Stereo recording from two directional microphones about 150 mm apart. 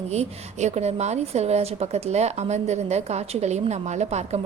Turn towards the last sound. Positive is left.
turn(degrees=-45)  # may be behind; listen again after turning